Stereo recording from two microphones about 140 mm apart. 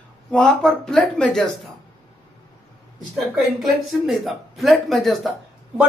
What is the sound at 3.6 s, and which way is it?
Speech, centre (ahead or behind).